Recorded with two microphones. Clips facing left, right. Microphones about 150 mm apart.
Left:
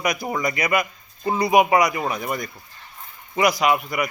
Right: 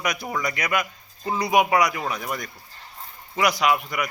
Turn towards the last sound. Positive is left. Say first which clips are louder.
# left 2 dB
turn(degrees=5)  # may be behind; listen again after turning